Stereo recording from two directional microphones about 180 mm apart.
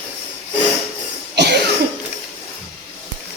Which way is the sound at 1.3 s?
70° right (ahead or behind).